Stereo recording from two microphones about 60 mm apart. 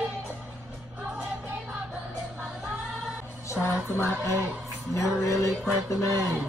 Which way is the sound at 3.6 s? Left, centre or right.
Left.